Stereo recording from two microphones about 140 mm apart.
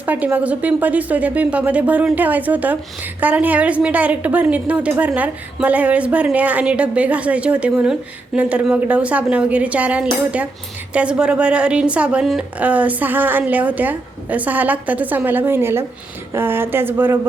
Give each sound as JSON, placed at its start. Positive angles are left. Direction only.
{"t": 0.0, "sound": "a woman's voice", "side_deg": -10}